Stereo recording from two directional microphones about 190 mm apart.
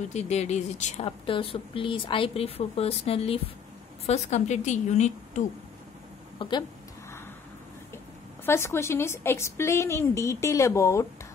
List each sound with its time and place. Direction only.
0.1 s speech: 35° left (ahead or behind)
6.3 s speech: 25° left (ahead or behind)
8.5 s a woman's voice: 15° left (ahead or behind)